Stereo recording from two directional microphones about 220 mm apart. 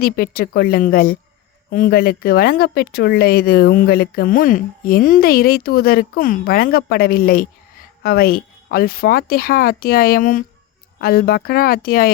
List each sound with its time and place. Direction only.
0.0 s speech: 45° left (ahead or behind)